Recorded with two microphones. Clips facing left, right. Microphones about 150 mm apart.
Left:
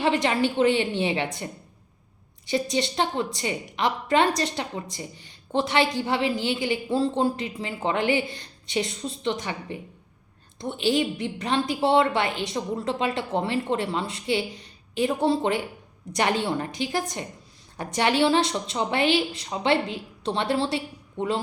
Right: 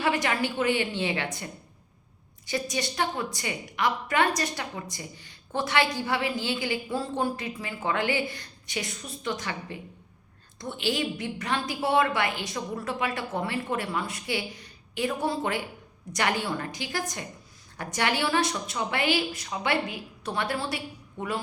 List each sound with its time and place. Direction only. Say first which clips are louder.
0.0 s a woman's voice: left 4 dB; 25° left (ahead or behind)
2.5 s a woman's voice: left 5 dB; 25° left (ahead or behind)